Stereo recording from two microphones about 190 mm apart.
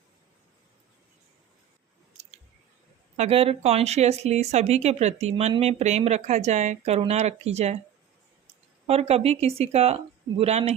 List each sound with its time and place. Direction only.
3.2 s speech: 30° right (ahead or behind)
8.9 s speech: 35° right (ahead or behind)